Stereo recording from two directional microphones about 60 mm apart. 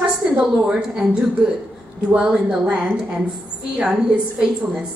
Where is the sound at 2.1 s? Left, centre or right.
Centre.